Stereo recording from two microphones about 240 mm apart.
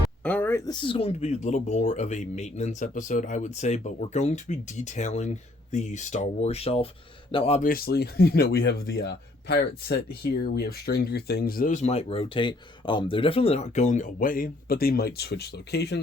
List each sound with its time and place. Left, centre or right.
0.2 s speech: centre; by 16.0 s left